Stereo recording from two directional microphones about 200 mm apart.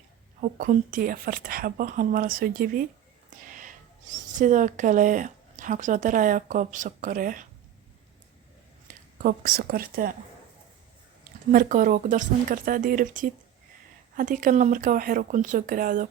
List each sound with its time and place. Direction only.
0.6 s speech: 40° right (ahead or behind)
9.1 s speech: 45° right (ahead or behind)
11.5 s speech: 40° right (ahead or behind)